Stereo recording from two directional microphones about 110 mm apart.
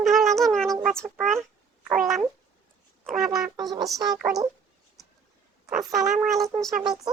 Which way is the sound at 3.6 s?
40° right (ahead or behind).